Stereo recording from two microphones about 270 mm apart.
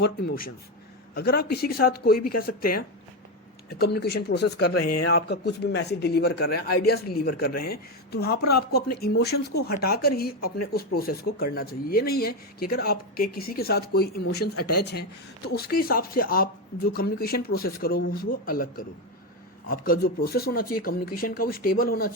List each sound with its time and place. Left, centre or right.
0.0 s speech: left
3.7 s speech: left
15.4 s speech: left